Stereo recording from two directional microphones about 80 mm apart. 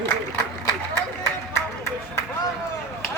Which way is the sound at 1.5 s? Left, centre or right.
Left.